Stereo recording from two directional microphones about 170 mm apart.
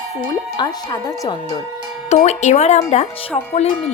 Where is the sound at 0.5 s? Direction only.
25° left (ahead or behind).